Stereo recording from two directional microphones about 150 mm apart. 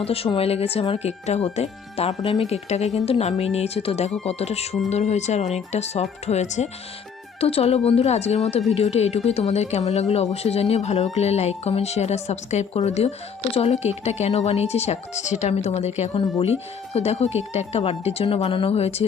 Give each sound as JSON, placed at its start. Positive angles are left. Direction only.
{"t": 0.0, "sound": "speech", "side_deg": 40}